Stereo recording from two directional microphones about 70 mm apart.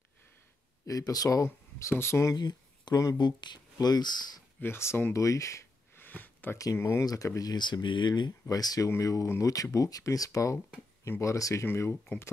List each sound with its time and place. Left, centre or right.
0.8 s speech: left
2.3 s a sound: left
3.2 s speech: left
3.7 s speech: left
4.6 s speech: left
5.1 s speech: left
5.9 s a sound: left
6.8 s speech: left
7.1 s speech: left
8.8 s speech: left
11.6 s speech: left